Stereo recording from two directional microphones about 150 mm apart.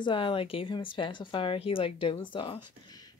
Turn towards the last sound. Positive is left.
turn(degrees=30)  # may be behind; listen again after turning